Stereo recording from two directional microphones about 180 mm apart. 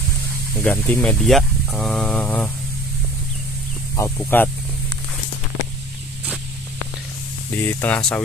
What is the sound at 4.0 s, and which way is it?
Speech, 10° left (ahead or behind).